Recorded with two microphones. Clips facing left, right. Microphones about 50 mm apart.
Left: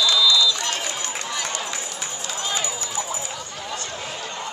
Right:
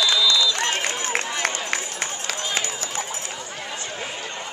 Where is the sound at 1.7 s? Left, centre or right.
Right.